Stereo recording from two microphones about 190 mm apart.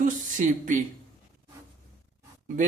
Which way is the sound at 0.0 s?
40° right (ahead or behind).